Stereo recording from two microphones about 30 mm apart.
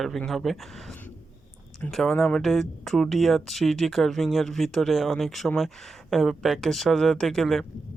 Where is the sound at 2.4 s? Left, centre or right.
Centre.